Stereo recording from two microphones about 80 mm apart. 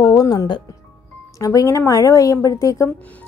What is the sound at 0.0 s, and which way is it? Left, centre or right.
Music, left.